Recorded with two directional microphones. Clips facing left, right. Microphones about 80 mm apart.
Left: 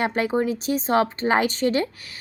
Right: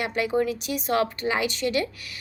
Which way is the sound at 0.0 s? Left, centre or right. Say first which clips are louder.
Left 2 dB; left.